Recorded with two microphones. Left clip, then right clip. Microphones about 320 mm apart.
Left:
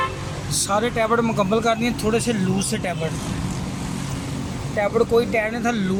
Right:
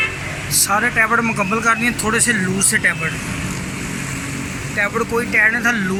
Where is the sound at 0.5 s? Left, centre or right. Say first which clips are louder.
Right 5 dB; centre.